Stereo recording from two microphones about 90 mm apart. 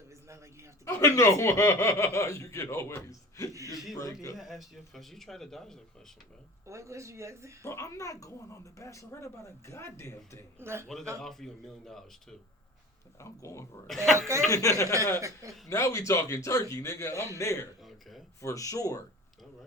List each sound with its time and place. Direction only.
0.9 s speech: 30° left (ahead or behind)
4.4 s speech: centre (ahead or behind)
6.7 s speech: 35° right (ahead or behind)
7.6 s speech: 30° left (ahead or behind)
10.6 s a man's voice: 30° right (ahead or behind)
11.2 s speech: 5° left (ahead or behind)
13.1 s speech: 35° left (ahead or behind)
13.8 s speech: 5° left (ahead or behind)
14.2 s speech: 30° right (ahead or behind)
14.5 s speech: 35° left (ahead or behind)
15.2 s speech: 35° right (ahead or behind)
15.7 s speech: 35° left (ahead or behind)